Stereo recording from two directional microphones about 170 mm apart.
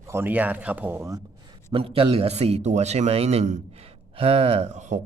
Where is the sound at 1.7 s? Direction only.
35° right (ahead or behind).